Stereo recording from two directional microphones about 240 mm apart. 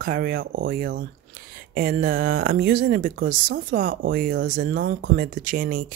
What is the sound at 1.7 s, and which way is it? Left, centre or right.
Speech, right.